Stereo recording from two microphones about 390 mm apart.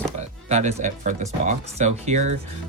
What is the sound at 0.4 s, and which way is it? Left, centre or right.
Speech, centre.